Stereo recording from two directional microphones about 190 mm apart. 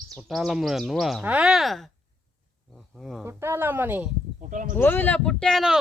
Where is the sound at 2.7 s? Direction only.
Centre (ahead or behind).